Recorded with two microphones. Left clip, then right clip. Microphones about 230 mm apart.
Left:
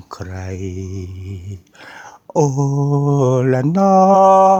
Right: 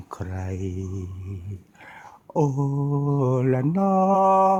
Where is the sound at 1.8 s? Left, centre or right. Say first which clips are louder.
Left 8 dB; left.